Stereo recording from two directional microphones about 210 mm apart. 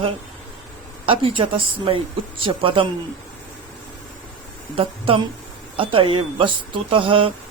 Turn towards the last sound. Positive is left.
turn(degrees=-25)  # may be behind; listen again after turning